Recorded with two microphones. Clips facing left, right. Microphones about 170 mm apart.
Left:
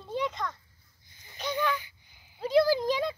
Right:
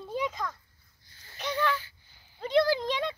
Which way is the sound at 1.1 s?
15° left (ahead or behind).